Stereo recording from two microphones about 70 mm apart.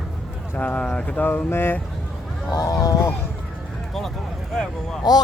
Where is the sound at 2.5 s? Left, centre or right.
Left.